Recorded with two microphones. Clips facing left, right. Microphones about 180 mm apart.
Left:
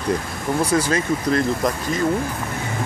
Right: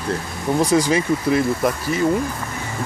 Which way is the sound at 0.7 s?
15° right (ahead or behind).